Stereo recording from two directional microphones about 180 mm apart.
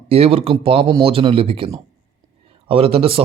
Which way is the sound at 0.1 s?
35° right (ahead or behind).